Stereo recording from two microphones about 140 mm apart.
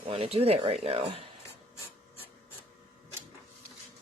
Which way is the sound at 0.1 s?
45° right (ahead or behind).